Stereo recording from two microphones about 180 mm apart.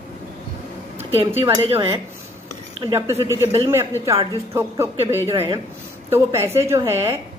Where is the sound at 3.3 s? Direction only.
15° right (ahead or behind).